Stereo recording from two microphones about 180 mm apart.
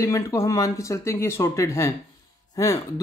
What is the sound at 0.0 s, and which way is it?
Speech, 15° left (ahead or behind).